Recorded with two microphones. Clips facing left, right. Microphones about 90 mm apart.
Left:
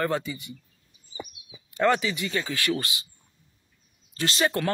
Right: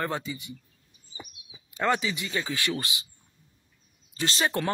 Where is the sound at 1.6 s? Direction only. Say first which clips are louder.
Left 3 dB; 15° right (ahead or behind).